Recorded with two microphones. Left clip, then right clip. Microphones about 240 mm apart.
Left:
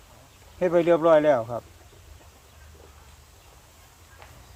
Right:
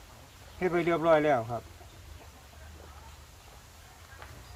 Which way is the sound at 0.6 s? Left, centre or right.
Left.